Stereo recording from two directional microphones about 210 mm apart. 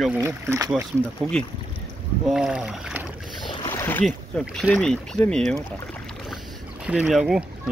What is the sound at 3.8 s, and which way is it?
Boat, 10° left (ahead or behind).